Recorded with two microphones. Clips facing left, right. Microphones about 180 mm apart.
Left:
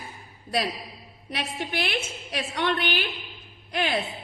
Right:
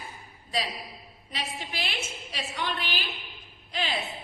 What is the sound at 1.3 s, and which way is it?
A woman's voice, 60° left (ahead or behind).